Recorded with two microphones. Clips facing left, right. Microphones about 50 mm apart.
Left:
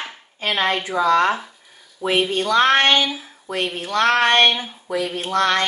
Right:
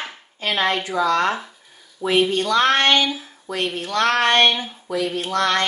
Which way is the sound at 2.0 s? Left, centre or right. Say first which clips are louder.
Right 1 dB; left.